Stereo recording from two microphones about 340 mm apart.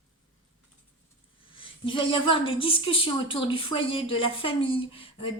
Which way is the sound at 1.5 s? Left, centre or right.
Centre.